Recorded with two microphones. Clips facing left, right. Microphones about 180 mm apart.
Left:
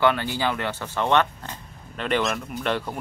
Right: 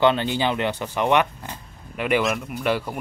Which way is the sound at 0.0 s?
20° right (ahead or behind).